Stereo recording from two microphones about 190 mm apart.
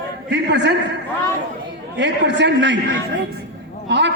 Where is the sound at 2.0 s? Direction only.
65° right (ahead or behind).